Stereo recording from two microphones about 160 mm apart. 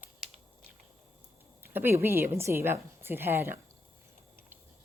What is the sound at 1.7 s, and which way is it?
A woman's voice, 15° right (ahead or behind).